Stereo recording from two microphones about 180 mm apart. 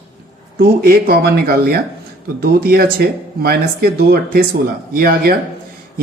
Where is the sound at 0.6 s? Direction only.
55° right (ahead or behind).